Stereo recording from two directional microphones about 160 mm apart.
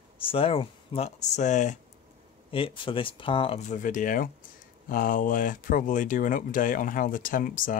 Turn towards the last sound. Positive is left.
turn(degrees=60)  # may be behind; listen again after turning